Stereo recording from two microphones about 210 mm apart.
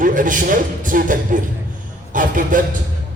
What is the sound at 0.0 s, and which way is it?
Speech, 40° right (ahead or behind).